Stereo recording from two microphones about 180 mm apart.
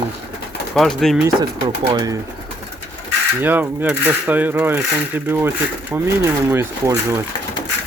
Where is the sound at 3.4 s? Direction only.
10° right (ahead or behind).